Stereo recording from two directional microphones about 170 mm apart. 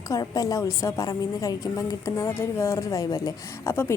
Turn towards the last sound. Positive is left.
turn(degrees=15)  # may be behind; listen again after turning